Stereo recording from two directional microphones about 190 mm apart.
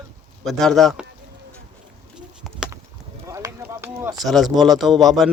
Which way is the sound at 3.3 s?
15° right (ahead or behind).